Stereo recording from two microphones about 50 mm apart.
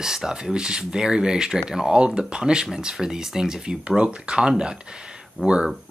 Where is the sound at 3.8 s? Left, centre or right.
Right.